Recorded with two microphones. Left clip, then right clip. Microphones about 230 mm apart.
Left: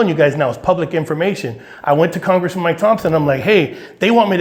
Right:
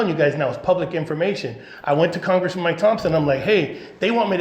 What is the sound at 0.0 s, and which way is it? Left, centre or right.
A man's voice, left.